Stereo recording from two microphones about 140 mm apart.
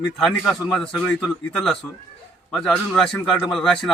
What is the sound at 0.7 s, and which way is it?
Speech, 5° left (ahead or behind).